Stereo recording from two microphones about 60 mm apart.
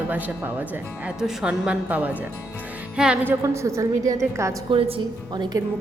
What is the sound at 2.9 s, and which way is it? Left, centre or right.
Music, centre.